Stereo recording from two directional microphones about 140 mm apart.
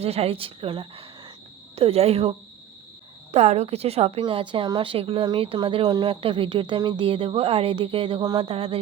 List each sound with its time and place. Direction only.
0.0 s a woman's voice: 45° right (ahead or behind)
3.3 s a woman's voice: 55° right (ahead or behind)
8.2 s speech: 30° right (ahead or behind)
8.4 s a woman's voice: 45° right (ahead or behind)